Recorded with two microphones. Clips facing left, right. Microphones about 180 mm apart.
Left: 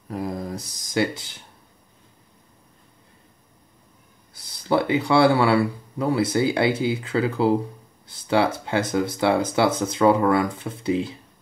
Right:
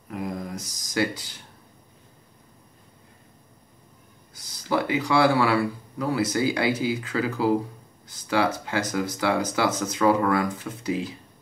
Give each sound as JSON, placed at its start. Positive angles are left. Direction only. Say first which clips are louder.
{"t": 0.1, "sound": "speech", "louder": "left 3 dB", "side_deg": 35}
{"t": 4.4, "sound": "speech", "louder": "left 4 dB", "side_deg": 30}